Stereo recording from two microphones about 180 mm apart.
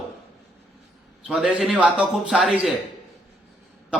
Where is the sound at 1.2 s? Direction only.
5° right (ahead or behind).